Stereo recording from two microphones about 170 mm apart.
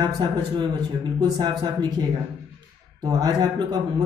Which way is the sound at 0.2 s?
25° right (ahead or behind).